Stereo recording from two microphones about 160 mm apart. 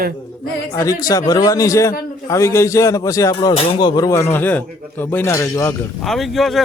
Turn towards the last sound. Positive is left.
turn(degrees=0)  # may be behind; listen again after turning